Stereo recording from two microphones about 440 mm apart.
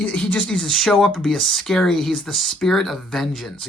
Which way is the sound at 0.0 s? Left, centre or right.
Centre.